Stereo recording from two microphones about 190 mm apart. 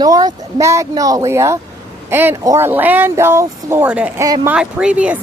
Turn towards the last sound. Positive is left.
turn(degrees=-5)  # may be behind; listen again after turning